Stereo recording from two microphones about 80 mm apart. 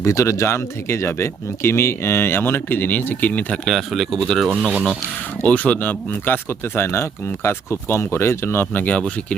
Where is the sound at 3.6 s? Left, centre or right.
Centre.